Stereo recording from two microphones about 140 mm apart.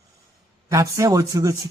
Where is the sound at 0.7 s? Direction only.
20° right (ahead or behind).